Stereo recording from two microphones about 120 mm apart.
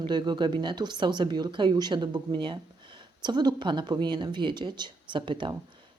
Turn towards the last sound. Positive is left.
turn(degrees=-45)  # may be behind; listen again after turning